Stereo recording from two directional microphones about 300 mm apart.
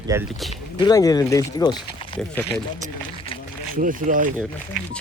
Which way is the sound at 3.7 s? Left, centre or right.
Right.